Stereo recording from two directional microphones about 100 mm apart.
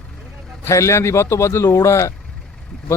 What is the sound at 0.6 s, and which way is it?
A man's voice, 30° left (ahead or behind).